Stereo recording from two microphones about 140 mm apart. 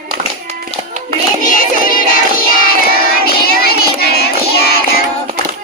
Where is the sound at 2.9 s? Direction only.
90° left.